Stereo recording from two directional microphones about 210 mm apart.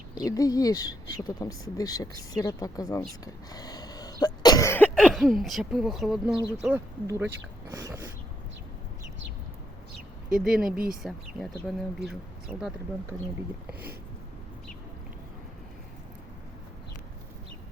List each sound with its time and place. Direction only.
0.1 s speech: 15° left (ahead or behind)
3.2 s cough: 20° left (ahead or behind)
4.9 s speech: centre (ahead or behind)
7.7 s a sound: 15° right (ahead or behind)
10.2 s speech: 5° right (ahead or behind)